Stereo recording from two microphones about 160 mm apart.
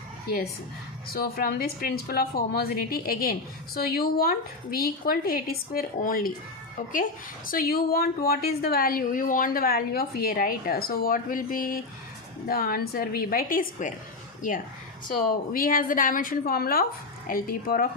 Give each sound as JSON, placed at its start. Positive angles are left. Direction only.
{"t": 1.0, "sound": "a woman's voice", "side_deg": 70}
{"t": 15.0, "sound": "a woman's voice", "side_deg": 55}